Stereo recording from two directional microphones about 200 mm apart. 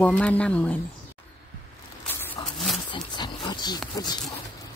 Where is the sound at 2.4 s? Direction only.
20° left (ahead or behind).